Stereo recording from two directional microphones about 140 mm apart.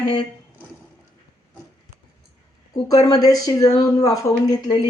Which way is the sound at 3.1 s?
25° left (ahead or behind).